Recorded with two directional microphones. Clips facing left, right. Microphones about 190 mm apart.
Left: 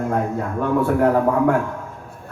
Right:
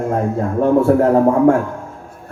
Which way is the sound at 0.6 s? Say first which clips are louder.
Right 6 dB; 30° right (ahead or behind).